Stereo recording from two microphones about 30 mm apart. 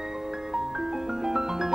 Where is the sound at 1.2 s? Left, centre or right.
Centre.